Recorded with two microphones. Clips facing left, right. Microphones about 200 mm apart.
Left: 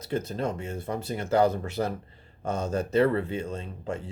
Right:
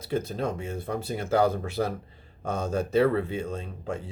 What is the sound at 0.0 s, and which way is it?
Speech, 10° right (ahead or behind).